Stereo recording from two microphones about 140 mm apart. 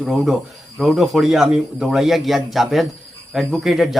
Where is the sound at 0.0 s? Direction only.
5° right (ahead or behind).